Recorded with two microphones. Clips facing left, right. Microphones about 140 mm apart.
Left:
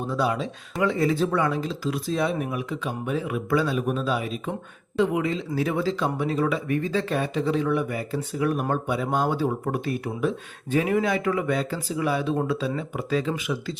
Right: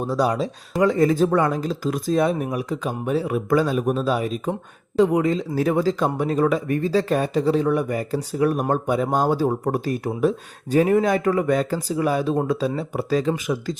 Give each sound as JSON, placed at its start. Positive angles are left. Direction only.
{"t": 0.0, "sound": "speech", "side_deg": -40}